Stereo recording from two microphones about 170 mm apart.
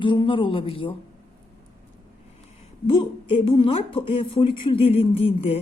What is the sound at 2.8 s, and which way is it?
A woman's voice, 30° left (ahead or behind).